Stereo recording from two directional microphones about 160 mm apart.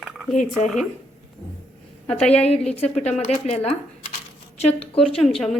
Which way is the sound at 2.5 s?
40° left (ahead or behind).